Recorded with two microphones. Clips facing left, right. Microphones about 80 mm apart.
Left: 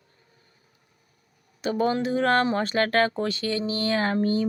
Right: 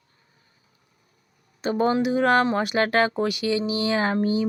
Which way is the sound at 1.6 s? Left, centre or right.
Right.